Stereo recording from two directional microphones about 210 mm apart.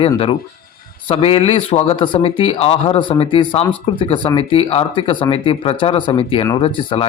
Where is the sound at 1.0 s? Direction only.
25° left (ahead or behind).